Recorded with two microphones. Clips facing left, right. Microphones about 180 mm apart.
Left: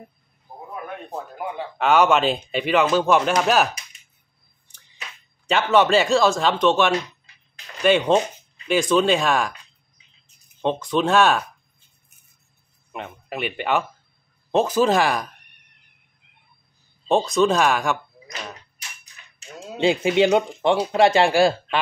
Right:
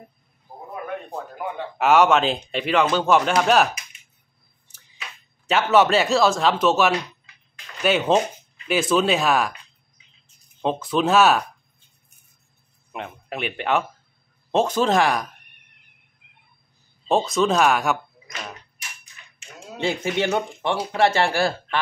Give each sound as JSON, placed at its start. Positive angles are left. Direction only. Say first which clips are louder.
{"t": 1.8, "sound": "a man's voice", "louder": "right 1 dB", "side_deg": 0}
{"t": 5.5, "sound": "a man's voice", "louder": "even", "side_deg": -5}
{"t": 10.6, "sound": "a man's voice", "louder": "even", "side_deg": -5}
{"t": 12.9, "sound": "a man's voice", "louder": "even", "side_deg": 0}
{"t": 17.1, "sound": "a man's voice", "louder": "left 1 dB", "side_deg": 0}
{"t": 19.8, "sound": "speech", "louder": "left 6 dB", "side_deg": 15}